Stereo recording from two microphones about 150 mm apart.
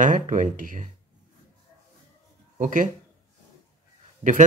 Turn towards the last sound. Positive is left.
turn(degrees=-50)  # may be behind; listen again after turning